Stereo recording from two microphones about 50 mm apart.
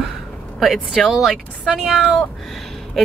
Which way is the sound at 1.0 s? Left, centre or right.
Centre.